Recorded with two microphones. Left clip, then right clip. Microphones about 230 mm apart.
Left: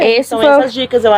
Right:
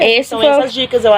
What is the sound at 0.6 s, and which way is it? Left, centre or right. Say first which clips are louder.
Speech: left 1 dB; left.